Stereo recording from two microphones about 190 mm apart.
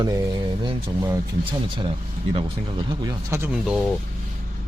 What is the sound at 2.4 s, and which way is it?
Speech, 25° right (ahead or behind).